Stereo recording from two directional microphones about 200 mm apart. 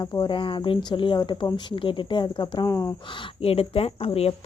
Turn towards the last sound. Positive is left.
turn(degrees=30)  # may be behind; listen again after turning